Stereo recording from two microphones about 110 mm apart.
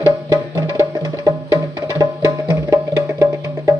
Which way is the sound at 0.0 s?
25° right (ahead or behind).